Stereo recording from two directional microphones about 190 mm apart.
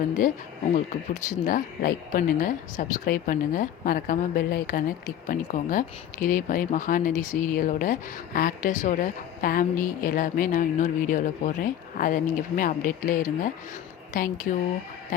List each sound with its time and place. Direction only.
0.7 s speech: 40° left (ahead or behind)